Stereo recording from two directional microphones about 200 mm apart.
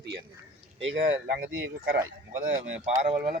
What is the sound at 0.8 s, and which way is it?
Speech, 70° right (ahead or behind).